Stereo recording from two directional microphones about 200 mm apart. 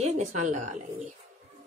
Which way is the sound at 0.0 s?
35° right (ahead or behind).